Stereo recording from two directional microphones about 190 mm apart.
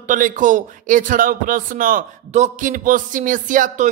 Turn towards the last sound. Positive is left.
turn(degrees=-45)  # may be behind; listen again after turning